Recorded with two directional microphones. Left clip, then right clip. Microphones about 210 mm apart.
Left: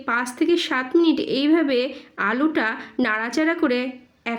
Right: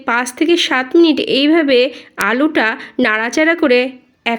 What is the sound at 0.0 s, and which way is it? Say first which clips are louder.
A woman's voice: right 7 dB; 30° right (ahead or behind).